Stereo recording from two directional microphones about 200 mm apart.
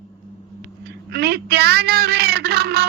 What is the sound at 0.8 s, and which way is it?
A man's voice, 55° right (ahead or behind).